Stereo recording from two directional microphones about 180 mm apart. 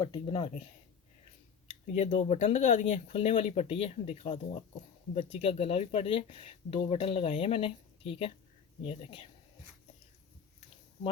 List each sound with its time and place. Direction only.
0.0 s speech: 25° left (ahead or behind)
1.9 s speech: 40° left (ahead or behind)